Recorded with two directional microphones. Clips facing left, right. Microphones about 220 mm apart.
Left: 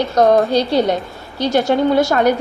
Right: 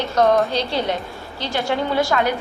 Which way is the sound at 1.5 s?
45° left (ahead or behind).